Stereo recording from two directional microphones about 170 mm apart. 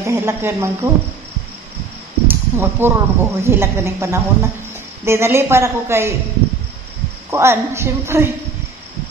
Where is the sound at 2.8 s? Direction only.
15° right (ahead or behind).